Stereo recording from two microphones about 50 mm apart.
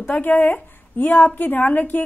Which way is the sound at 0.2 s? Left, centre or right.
Left.